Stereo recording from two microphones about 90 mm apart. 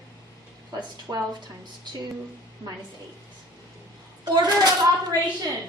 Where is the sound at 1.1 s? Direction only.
40° right (ahead or behind).